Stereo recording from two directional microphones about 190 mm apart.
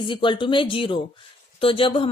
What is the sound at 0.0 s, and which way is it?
Speech, 25° left (ahead or behind).